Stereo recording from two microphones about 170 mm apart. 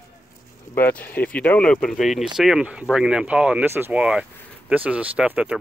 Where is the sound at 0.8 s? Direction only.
10° left (ahead or behind).